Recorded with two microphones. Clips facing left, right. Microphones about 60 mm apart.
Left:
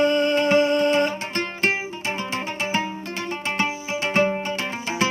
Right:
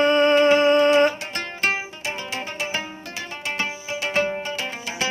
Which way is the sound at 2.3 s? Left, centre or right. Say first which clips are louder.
Left 2 dB; left.